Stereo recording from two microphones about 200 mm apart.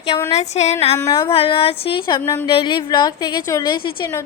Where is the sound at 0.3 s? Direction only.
35° left (ahead or behind).